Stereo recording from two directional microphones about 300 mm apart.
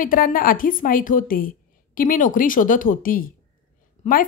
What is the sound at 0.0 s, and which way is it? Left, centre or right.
Speech, left.